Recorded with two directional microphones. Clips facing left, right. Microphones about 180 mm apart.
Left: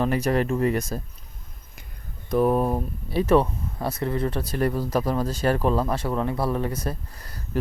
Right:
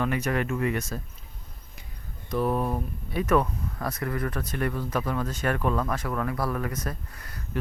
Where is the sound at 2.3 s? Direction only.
45° left (ahead or behind).